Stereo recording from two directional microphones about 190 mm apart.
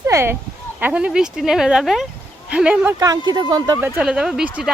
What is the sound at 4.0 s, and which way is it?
Speech, 5° right (ahead or behind).